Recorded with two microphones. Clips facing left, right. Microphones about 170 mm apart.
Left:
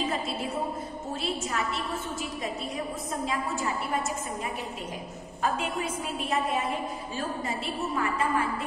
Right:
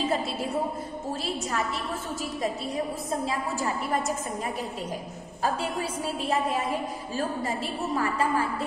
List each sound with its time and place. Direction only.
5.4 s a woman's voice: 35° right (ahead or behind)